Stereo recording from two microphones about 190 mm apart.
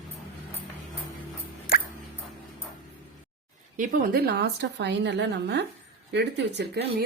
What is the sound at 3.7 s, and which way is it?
A woman's voice, 45° right (ahead or behind).